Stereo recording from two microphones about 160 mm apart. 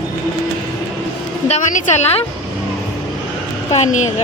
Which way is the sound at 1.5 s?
50° left (ahead or behind).